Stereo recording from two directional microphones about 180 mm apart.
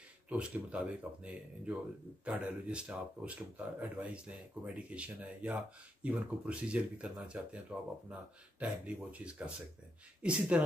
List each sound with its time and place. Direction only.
0.3 s speech: 5° right (ahead or behind)